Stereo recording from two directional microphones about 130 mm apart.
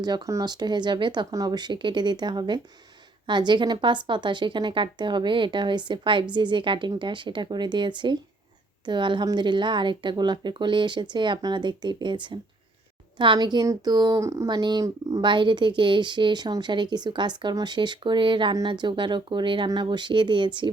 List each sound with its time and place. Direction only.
0.0 s a woman's voice: 30° right (ahead or behind)
15.2 s a woman's voice: 40° right (ahead or behind)